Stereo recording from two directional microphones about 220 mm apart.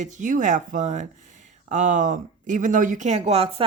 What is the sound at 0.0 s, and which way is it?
Speech, 35° right (ahead or behind).